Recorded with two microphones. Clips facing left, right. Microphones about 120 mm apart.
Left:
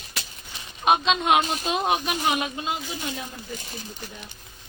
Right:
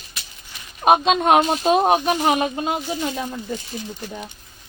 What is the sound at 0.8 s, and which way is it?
Speech, 45° right (ahead or behind).